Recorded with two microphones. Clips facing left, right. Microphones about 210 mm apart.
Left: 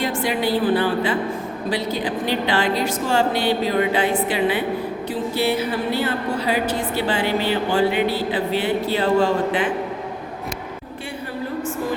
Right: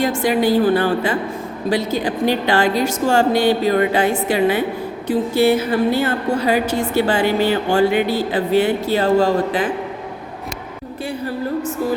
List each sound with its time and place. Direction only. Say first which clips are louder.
0.0 s a woman's voice: right 5 dB; 45° right (ahead or behind)